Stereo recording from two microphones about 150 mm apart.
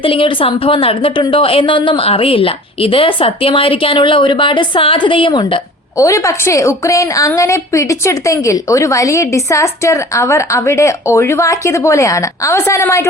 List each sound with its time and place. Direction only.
0.0 s a woman's voice: 35° left (ahead or behind)
6.0 s a woman's voice: 20° left (ahead or behind)